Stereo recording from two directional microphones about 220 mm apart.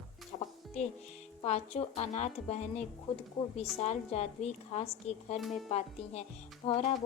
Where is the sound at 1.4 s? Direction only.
30° left (ahead or behind).